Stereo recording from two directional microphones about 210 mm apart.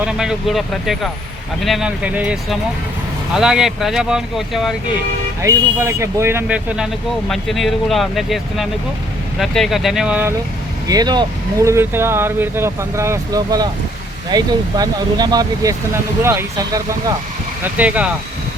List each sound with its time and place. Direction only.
0.0 s speech: 5° right (ahead or behind)
5.4 s speech: 15° right (ahead or behind)
10.8 s speech: 20° right (ahead or behind)